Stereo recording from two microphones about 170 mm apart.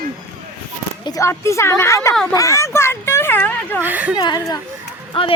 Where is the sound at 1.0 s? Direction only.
20° left (ahead or behind).